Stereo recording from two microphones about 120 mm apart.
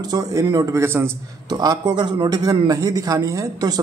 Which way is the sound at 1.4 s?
35° right (ahead or behind).